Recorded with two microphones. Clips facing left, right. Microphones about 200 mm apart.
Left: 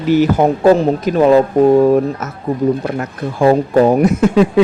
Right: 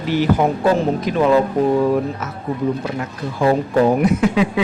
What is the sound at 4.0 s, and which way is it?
Speech, 45° left (ahead or behind).